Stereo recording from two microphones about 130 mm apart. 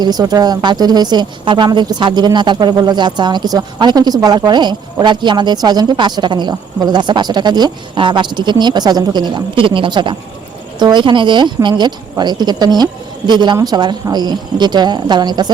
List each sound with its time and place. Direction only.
0.0 s speech: 30° right (ahead or behind)